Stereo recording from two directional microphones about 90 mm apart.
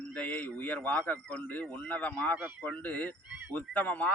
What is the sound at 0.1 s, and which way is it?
A man's voice, 15° left (ahead or behind).